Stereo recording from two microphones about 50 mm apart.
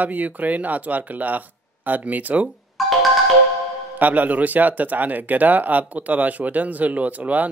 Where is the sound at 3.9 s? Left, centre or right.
Right.